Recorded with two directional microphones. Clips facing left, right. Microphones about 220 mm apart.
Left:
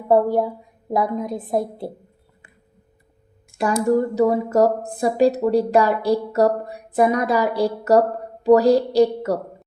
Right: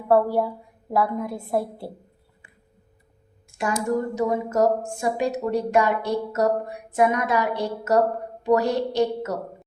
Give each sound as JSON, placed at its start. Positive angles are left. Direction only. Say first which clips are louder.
{"t": 0.1, "sound": "a woman's voice", "louder": "left 3 dB", "side_deg": 20}
{"t": 3.8, "sound": "speech", "louder": "left 7 dB", "side_deg": 35}